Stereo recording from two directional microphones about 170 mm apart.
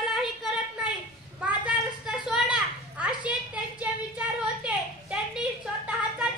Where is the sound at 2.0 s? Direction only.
5° right (ahead or behind).